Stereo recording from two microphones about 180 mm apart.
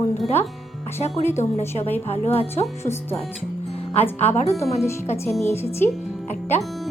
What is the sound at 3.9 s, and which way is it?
Speech, 35° left (ahead or behind).